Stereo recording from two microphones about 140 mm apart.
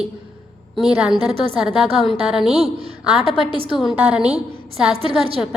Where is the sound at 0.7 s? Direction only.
5° right (ahead or behind).